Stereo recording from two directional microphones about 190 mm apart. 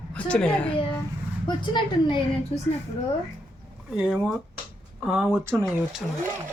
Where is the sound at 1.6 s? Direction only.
25° left (ahead or behind).